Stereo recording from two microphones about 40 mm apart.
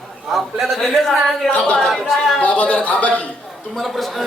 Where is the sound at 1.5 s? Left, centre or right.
Left.